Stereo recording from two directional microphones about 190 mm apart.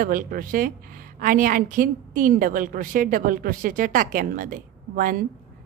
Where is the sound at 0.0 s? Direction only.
50° right (ahead or behind).